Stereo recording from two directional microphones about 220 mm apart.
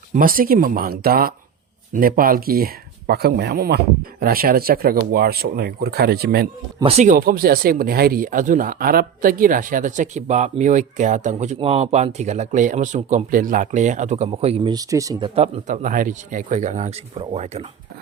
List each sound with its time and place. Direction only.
0.1 s speech: 40° right (ahead or behind)
6.8 s speech: 30° right (ahead or behind)
15.6 s speech: 35° right (ahead or behind)